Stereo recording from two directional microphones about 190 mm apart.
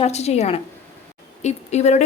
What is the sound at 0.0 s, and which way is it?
A woman's voice, 35° left (ahead or behind).